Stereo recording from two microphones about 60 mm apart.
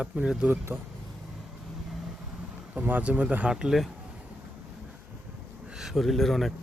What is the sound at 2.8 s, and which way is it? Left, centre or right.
Speech, right.